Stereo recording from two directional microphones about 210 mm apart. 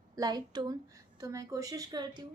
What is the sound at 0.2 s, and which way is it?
A woman's voice, 20° right (ahead or behind).